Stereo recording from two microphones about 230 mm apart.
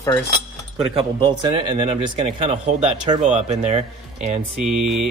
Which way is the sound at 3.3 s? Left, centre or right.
Right.